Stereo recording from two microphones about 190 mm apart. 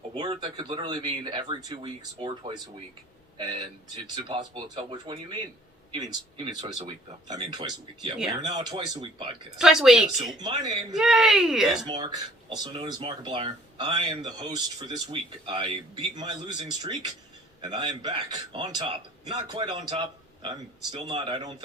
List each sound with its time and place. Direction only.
0.2 s speech: 25° right (ahead or behind)
9.6 s speech: centre (ahead or behind)
11.9 s speech: 20° right (ahead or behind)